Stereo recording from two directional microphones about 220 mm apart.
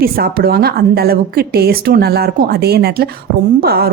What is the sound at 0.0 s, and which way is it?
A woman's voice, 45° right (ahead or behind).